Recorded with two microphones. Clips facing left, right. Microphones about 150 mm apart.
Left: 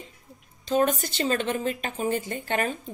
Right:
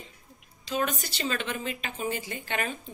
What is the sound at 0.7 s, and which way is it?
Speech, 50° left (ahead or behind).